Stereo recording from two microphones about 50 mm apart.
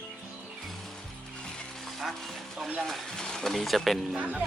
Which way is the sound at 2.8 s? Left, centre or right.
Centre.